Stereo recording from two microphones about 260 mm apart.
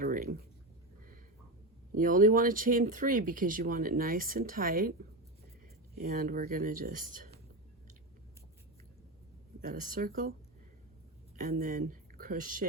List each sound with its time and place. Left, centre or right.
0.0 s a sound: right
2.0 s speech: right
6.0 s speech: right
9.6 s speech: right
11.3 s speech: right